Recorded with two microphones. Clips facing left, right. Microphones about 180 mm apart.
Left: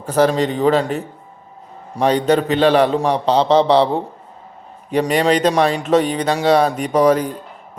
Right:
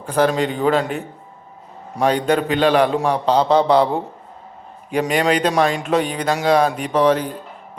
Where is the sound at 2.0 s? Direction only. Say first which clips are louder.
Left 2 dB; 10° right (ahead or behind).